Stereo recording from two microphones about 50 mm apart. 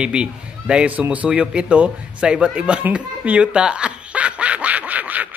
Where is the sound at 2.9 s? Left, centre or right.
Right.